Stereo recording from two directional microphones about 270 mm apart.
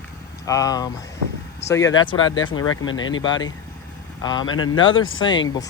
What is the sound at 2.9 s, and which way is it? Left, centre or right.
Speech, left.